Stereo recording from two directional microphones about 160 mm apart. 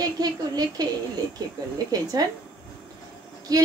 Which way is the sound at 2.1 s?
25° right (ahead or behind).